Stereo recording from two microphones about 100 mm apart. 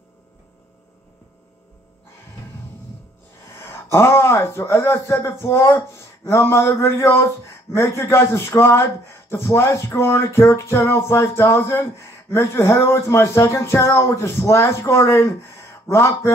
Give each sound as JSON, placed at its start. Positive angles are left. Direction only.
{"t": 3.5, "sound": "speech", "side_deg": 25}